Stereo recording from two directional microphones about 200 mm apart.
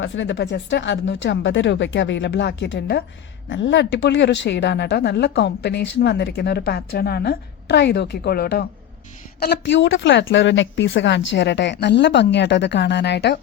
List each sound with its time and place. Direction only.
0.0 s a woman's voice: 70° left (ahead or behind)